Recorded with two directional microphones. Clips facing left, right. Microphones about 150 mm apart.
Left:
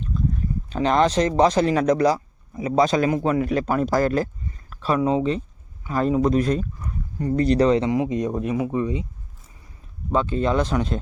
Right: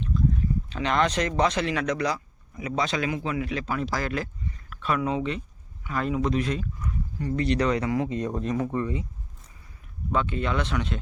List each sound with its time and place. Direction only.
0.7 s speech: 35° left (ahead or behind); by 9.0 s 15° left (ahead or behind)
10.1 s speech: 35° left (ahead or behind)